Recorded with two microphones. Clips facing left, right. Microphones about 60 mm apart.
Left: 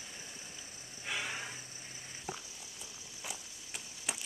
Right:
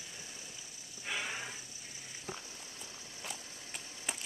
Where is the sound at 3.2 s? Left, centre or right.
Centre.